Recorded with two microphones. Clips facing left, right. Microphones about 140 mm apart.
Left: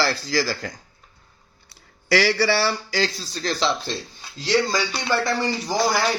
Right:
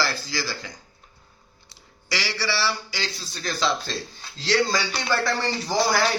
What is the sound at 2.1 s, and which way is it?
A man's voice, 50° left (ahead or behind).